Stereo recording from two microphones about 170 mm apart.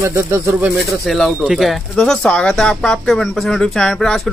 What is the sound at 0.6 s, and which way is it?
Speech, centre (ahead or behind).